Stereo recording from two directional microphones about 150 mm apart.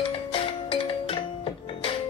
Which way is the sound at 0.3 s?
35° left (ahead or behind).